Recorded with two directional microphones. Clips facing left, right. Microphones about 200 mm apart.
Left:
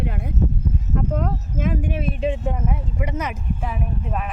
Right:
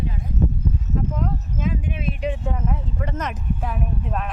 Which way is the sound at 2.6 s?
10° left (ahead or behind).